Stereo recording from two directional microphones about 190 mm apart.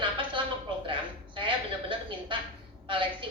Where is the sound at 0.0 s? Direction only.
25° right (ahead or behind).